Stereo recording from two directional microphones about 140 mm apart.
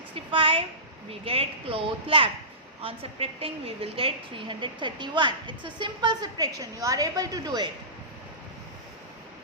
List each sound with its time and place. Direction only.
0.3 s a woman's voice: 40° right (ahead or behind)